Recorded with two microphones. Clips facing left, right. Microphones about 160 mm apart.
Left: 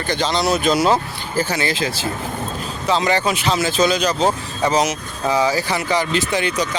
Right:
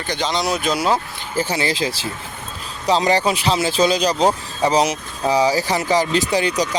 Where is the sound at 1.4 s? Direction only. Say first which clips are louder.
Even; 30° right (ahead or behind).